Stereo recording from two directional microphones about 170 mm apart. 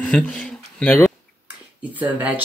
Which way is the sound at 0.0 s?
5° left (ahead or behind).